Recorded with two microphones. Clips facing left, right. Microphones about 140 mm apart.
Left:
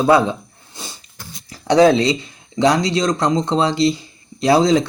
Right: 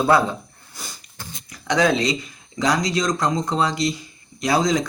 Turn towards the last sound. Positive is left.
turn(degrees=30)  # may be behind; listen again after turning